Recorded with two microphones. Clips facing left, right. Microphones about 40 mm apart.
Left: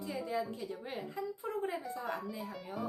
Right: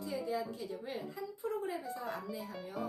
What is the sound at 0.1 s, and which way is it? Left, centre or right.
A woman's voice, left.